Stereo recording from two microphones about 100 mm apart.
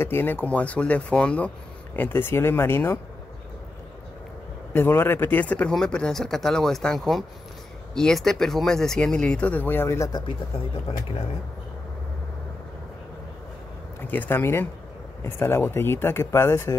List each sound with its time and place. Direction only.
0.0 s speech: 20° left (ahead or behind)
4.7 s speech: 25° left (ahead or behind)
14.0 s speech: 20° left (ahead or behind)